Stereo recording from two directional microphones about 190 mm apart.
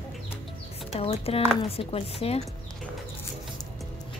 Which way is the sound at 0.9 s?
30° left (ahead or behind).